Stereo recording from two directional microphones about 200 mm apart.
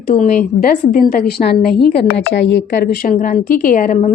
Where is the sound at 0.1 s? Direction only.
40° left (ahead or behind); by 2.6 s 65° left (ahead or behind).